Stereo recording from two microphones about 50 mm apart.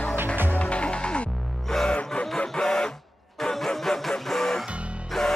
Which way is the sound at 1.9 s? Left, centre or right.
Left.